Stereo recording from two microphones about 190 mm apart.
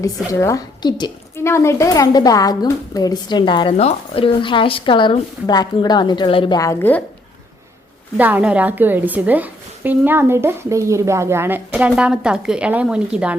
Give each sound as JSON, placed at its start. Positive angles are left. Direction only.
{"t": 0.3, "sound": "a woman's voice", "side_deg": 15}
{"t": 8.2, "sound": "a woman's voice", "side_deg": -10}